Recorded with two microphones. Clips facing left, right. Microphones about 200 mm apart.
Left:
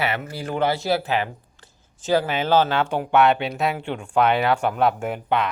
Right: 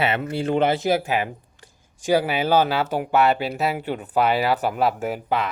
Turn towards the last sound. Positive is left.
turn(degrees=0)  # may be behind; listen again after turning